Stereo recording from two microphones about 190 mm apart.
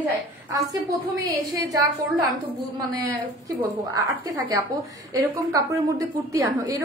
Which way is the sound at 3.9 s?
20° right (ahead or behind).